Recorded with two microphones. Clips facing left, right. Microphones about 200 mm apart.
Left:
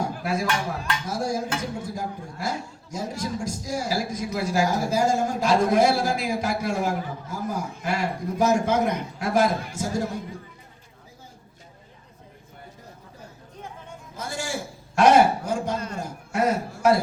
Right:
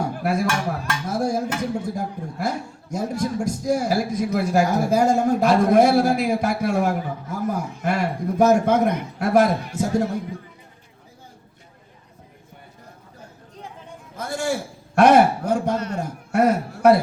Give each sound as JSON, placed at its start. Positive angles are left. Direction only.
{"t": 0.0, "sound": "dishes", "side_deg": -60}
{"t": 1.8, "sound": "a man's voice", "side_deg": -60}
{"t": 14.2, "sound": "a sound", "side_deg": -60}